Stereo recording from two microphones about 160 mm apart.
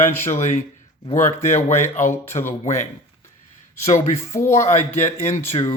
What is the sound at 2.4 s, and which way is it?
Speech, 35° left (ahead or behind).